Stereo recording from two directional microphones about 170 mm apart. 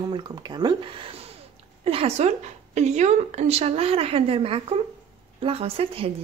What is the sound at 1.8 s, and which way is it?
Speech, 35° right (ahead or behind).